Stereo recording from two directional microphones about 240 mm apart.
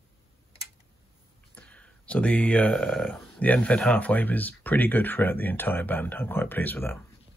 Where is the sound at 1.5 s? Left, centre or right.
Centre.